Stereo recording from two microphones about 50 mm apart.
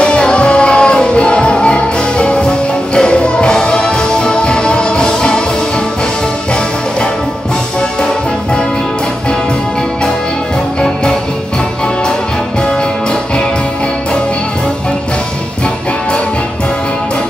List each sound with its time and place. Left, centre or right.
0.0 s music: left